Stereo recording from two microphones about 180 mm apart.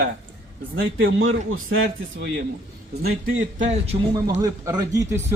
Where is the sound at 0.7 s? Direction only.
90° right.